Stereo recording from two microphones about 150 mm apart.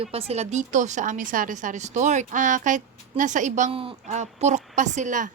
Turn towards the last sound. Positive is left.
turn(degrees=-60)  # may be behind; listen again after turning